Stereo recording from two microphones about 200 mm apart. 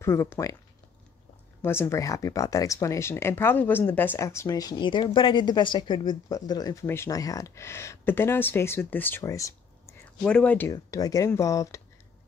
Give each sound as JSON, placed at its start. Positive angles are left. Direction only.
{"t": 0.0, "sound": "speech", "side_deg": 15}
{"t": 1.6, "sound": "speech", "side_deg": 10}